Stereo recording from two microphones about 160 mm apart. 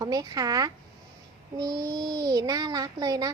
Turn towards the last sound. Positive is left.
turn(degrees=-25)  # may be behind; listen again after turning